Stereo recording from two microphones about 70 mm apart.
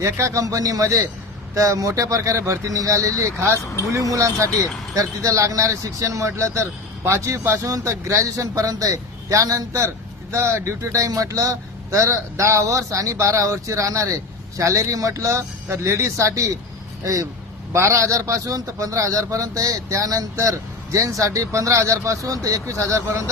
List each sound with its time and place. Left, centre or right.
0.0 s a man's voice: right
4.0 s a man's voice: right
10.3 s a man's voice: right
17.7 s a man's voice: right